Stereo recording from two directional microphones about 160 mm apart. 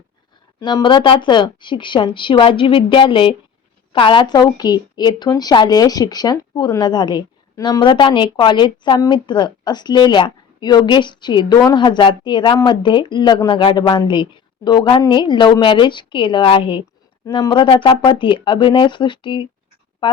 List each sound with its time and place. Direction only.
0.6 s a woman's voice: 30° left (ahead or behind)